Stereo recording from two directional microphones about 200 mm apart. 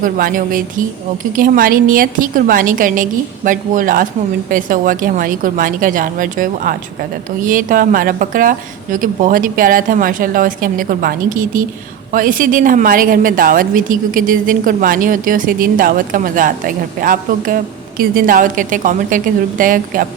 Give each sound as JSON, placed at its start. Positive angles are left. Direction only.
{"t": 0.0, "sound": "a woman's voice", "side_deg": -45}